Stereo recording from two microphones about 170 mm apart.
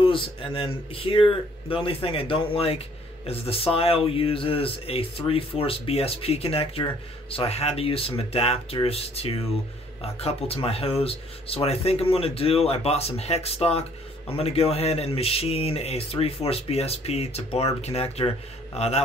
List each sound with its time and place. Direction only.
0.0 s speech: 30° left (ahead or behind)